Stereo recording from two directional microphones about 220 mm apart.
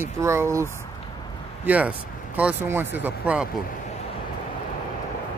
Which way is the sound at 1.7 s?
5° right (ahead or behind).